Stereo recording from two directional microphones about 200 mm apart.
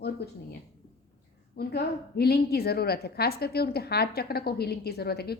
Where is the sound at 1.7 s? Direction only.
50° left (ahead or behind).